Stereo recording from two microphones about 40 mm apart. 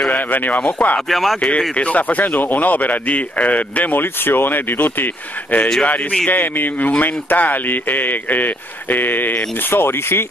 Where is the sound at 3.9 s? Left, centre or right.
Left.